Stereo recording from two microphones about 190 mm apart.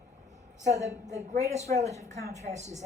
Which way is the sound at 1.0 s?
35° right (ahead or behind).